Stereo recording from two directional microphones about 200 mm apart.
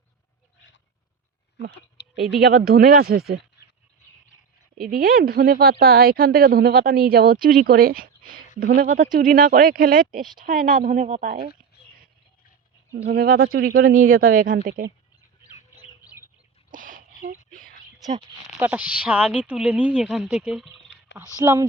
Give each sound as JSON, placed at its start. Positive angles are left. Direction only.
{"t": 2.1, "sound": "speech", "side_deg": 0}
{"t": 2.4, "sound": "a woman's voice", "side_deg": -50}
{"t": 4.9, "sound": "a woman's voice", "side_deg": -45}
{"t": 13.1, "sound": "a woman's voice", "side_deg": -50}
{"t": 16.7, "sound": "a sound", "side_deg": -40}
{"t": 18.6, "sound": "a woman's voice", "side_deg": -5}
{"t": 21.4, "sound": "speech", "side_deg": -15}